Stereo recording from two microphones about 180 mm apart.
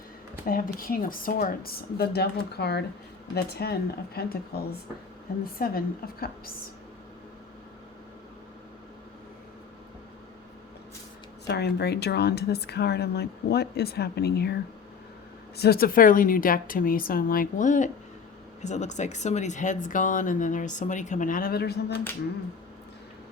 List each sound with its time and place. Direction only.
0.4 s a woman's voice: 50° left (ahead or behind)
11.4 s a woman's voice: 65° left (ahead or behind)
15.5 s speech: 60° left (ahead or behind)